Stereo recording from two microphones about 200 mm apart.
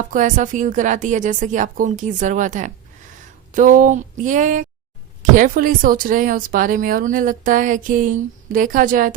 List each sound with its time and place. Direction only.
0.1 s a woman's voice: 40° right (ahead or behind)